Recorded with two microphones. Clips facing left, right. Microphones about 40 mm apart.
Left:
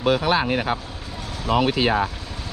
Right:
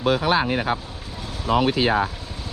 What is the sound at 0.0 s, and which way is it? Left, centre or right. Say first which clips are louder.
Speech: even; left.